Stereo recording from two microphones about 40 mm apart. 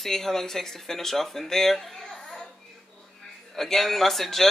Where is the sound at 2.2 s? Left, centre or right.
Centre.